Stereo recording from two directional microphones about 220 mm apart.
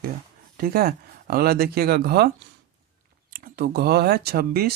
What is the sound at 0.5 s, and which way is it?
Speech, 45° right (ahead or behind).